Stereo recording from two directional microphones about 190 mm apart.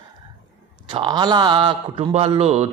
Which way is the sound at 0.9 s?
25° right (ahead or behind).